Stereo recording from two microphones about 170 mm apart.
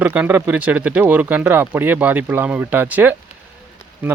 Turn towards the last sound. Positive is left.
turn(degrees=-10)  # may be behind; listen again after turning